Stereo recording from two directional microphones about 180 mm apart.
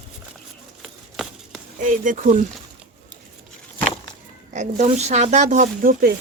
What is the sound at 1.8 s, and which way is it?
Speech, 45° right (ahead or behind).